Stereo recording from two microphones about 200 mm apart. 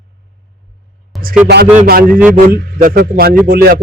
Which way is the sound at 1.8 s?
50° right (ahead or behind).